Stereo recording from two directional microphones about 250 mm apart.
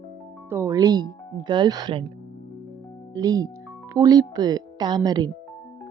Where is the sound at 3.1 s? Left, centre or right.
Centre.